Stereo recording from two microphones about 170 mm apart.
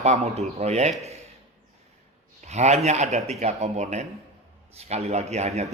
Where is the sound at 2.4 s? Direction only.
40° right (ahead or behind).